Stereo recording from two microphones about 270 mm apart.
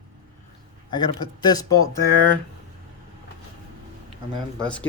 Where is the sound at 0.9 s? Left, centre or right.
Centre.